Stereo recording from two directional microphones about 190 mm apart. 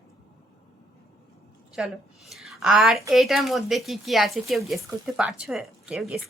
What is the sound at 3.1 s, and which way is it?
Speech, centre (ahead or behind).